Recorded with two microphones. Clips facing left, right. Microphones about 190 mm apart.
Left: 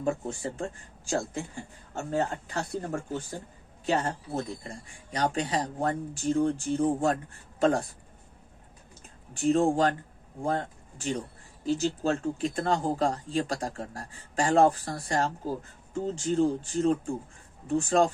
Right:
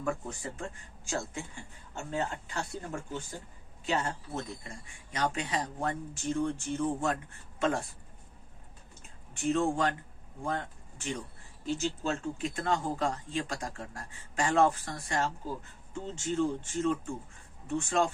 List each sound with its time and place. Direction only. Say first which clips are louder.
0.0 s speech: left 5 dB; 25° left (ahead or behind)
9.3 s speech: left 5 dB; 35° left (ahead or behind)